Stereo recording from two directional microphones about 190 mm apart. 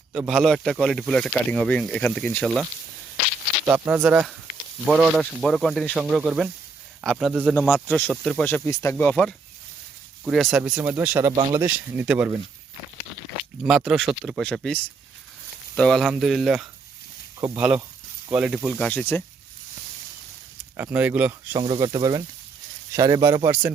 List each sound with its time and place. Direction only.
0.1 s speech: centre (ahead or behind)
3.7 s speech: 10° right (ahead or behind)
11.3 s speech: 25° right (ahead or behind)
11.6 s speech: 10° right (ahead or behind)
13.6 s speech: centre (ahead or behind)
20.7 s speech: 10° right (ahead or behind)
21.6 s speech: 25° right (ahead or behind)